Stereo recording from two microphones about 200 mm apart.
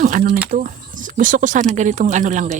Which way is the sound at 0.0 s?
40° right (ahead or behind).